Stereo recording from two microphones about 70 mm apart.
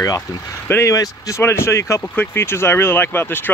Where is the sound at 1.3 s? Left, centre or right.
Left.